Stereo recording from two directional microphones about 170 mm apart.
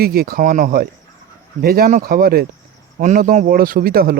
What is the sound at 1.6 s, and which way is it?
Speech, 60° right (ahead or behind).